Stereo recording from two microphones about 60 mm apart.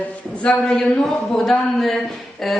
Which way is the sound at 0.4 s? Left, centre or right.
Centre.